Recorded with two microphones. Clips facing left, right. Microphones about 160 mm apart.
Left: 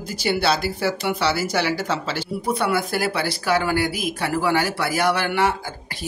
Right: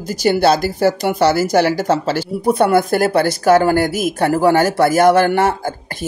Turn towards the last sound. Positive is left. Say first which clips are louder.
# right 6 dB
turn(degrees=-45)  # may be behind; listen again after turning